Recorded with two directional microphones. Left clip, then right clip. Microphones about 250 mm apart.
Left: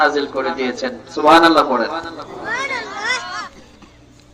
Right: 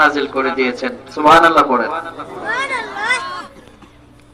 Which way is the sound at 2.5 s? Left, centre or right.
Right.